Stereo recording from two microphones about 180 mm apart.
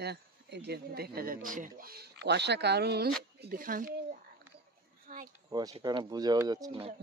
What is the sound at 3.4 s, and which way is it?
Speech, 50° right (ahead or behind).